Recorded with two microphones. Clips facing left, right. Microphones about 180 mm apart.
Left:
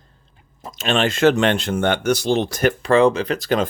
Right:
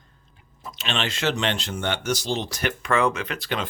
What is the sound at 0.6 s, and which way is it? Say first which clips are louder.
Speech: left 9 dB; 45° left (ahead or behind).